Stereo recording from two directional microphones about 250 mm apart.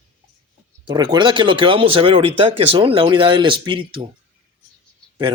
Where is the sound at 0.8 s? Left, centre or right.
Centre.